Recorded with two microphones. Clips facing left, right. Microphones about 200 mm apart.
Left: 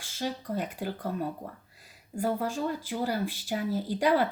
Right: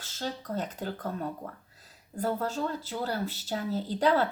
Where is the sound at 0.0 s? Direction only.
10° left (ahead or behind).